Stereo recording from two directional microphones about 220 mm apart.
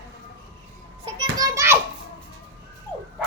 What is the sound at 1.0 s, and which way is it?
Children playing, 20° right (ahead or behind).